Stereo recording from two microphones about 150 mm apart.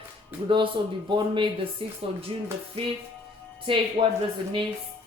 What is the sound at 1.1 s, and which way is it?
Speech, 30° right (ahead or behind).